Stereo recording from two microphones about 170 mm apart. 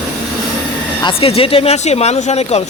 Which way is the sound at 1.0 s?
30° left (ahead or behind).